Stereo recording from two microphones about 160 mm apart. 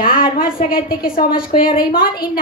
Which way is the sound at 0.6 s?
65° left (ahead or behind).